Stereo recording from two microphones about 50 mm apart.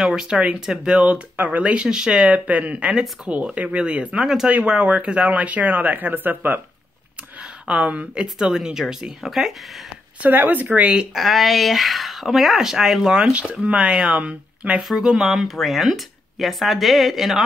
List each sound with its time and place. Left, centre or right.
0.0 s speech: centre
0.6 s speech: centre
1.0 s speech: right
1.9 s speech: centre; by 6.6 s right
7.6 s speech: right; by 9.5 s centre
10.2 s speech: right
11.1 s speech: centre
13.3 s speech: right
14.8 s speech: centre